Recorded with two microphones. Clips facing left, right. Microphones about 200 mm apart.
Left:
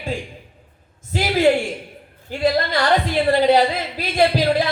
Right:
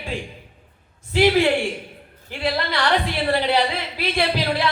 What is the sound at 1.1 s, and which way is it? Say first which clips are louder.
A woman's voice: even; 40° left (ahead or behind).